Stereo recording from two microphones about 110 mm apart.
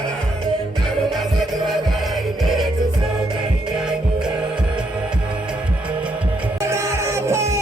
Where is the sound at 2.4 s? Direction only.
Centre (ahead or behind).